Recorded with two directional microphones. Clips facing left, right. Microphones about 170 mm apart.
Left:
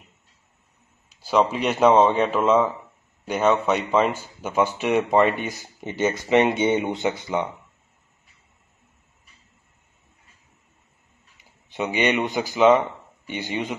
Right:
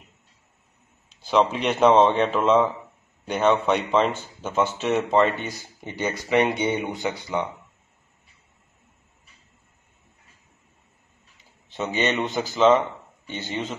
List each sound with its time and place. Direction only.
1.2 s speech: 5° left (ahead or behind)
11.7 s speech: 15° left (ahead or behind)